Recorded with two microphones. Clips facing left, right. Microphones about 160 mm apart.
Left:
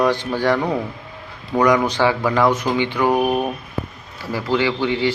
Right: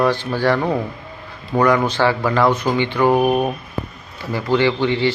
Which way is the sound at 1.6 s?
15° left (ahead or behind).